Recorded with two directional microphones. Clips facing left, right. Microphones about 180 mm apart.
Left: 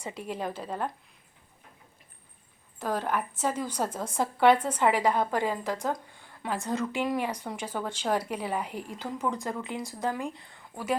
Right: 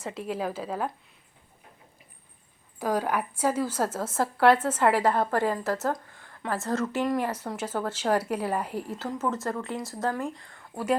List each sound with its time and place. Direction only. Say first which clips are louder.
0.0 s a woman's voice: right 3 dB; centre (ahead or behind)
2.7 s a woman's voice: right 3 dB; 10° right (ahead or behind)